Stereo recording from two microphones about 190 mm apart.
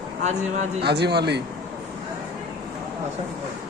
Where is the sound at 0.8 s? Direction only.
60° right (ahead or behind).